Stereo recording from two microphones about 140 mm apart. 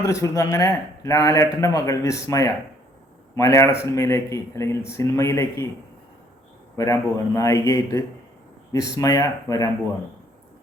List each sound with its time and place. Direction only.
0.0 s speech: 25° left (ahead or behind)
6.7 s speech: 20° left (ahead or behind)